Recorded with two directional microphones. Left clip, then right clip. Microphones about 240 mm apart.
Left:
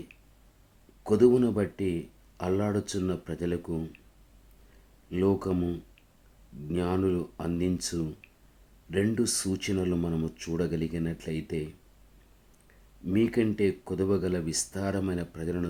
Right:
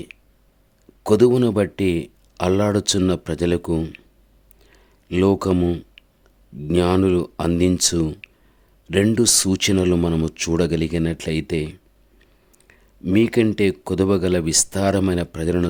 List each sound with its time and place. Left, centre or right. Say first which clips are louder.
1.0 s speech: right 7 dB; right
5.1 s speech: right 9 dB; right
13.1 s speech: right 9 dB; right